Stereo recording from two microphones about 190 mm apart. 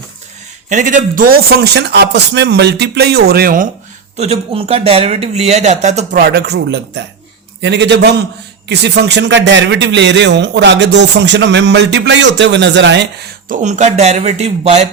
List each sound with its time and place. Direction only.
0.7 s a man's voice: 40° right (ahead or behind)
4.2 s speech: 35° right (ahead or behind)
6.1 s a man's voice: 55° right (ahead or behind)
13.5 s speech: 40° right (ahead or behind)